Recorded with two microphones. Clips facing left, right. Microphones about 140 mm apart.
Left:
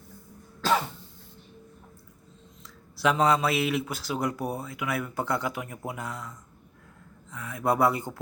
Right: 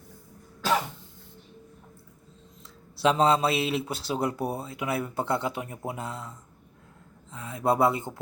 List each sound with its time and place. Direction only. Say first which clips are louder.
2.9 s speech: right 1 dB; 30° right (ahead or behind)